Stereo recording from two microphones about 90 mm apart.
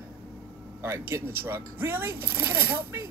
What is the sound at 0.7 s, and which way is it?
Speech, 30° right (ahead or behind).